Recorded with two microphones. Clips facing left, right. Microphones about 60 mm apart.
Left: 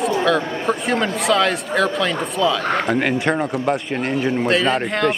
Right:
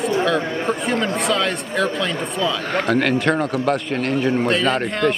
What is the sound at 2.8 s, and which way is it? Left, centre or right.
A man's voice, centre.